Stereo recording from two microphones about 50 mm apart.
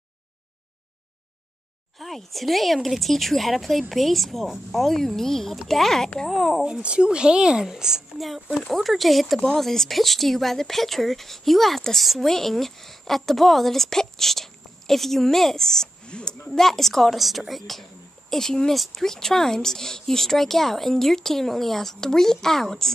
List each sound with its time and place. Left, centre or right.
2.0 s speech: centre
6.6 s speech: centre
8.5 s speech: centre
16.1 s a woman's voice: centre
16.4 s speech: centre